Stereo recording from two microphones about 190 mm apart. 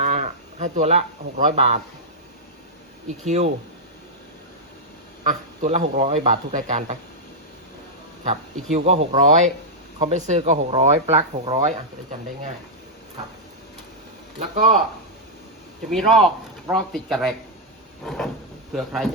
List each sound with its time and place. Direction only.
0.0 s livestock: 35° right (ahead or behind)
1.5 s speech: 35° right (ahead or behind)
3.2 s speech: 35° right (ahead or behind)
5.3 s speech: 35° right (ahead or behind)
8.3 s speech: 35° right (ahead or behind)
14.3 s speech: 40° right (ahead or behind)
15.9 s speech: centre (ahead or behind)